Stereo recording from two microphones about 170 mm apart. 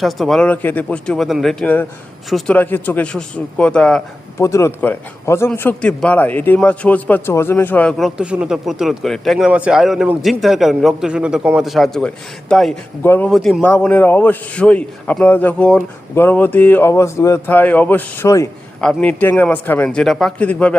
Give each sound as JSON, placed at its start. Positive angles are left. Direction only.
{"t": 0.0, "sound": "a man's voice", "side_deg": 0}
{"t": 4.4, "sound": "a man's voice", "side_deg": 15}